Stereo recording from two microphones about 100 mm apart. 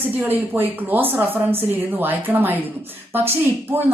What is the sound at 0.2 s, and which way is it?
A woman's voice, 20° right (ahead or behind).